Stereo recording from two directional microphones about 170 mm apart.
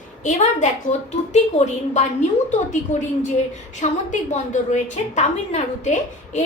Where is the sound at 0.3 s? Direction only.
45° left (ahead or behind).